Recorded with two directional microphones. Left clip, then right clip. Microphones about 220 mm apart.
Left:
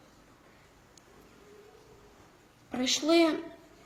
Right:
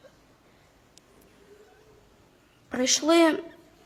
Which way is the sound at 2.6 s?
40° right (ahead or behind).